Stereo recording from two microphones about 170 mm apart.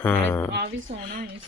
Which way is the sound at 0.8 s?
55° right (ahead or behind).